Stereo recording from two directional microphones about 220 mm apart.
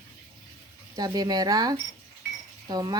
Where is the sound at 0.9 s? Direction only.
15° right (ahead or behind).